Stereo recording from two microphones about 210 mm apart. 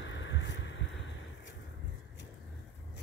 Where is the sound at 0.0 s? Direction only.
60° left (ahead or behind).